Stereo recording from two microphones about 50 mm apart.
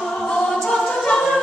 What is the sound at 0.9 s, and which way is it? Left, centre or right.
A capella, centre.